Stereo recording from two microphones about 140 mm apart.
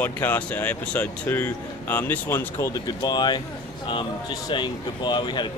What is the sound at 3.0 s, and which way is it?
Speech, 30° left (ahead or behind).